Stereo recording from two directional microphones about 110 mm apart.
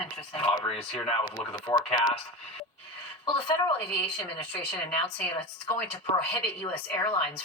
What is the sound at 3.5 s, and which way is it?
A woman's voice, 20° left (ahead or behind).